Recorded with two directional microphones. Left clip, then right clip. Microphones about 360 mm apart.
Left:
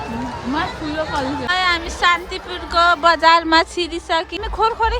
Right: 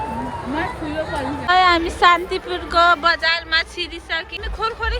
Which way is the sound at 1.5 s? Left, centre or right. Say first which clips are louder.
Right 5 dB; centre.